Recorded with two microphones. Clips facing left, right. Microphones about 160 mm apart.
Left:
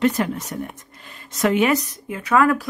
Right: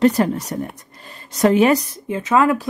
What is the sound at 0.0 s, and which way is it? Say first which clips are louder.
A woman's voice: right 5 dB; 35° right (ahead or behind).